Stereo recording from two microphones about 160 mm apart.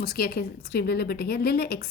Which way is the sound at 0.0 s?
70° left (ahead or behind).